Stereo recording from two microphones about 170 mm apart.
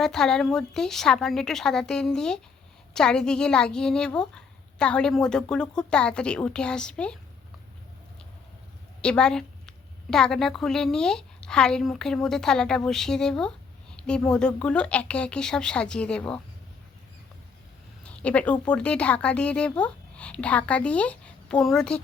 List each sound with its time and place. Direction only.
0.0 s a woman's voice: 5° left (ahead or behind)
9.0 s a woman's voice: 5° left (ahead or behind)
18.0 s a woman's voice: 5° left (ahead or behind)